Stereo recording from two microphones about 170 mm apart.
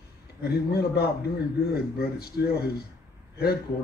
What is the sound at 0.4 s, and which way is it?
Speech, 70° left (ahead or behind).